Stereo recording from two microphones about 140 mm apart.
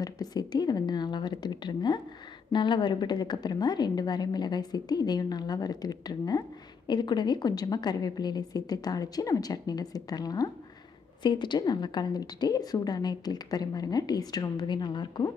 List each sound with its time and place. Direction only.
0.0 s a woman's voice: 30° left (ahead or behind)